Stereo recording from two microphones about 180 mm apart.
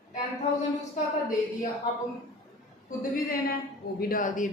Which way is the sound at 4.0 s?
50° left (ahead or behind).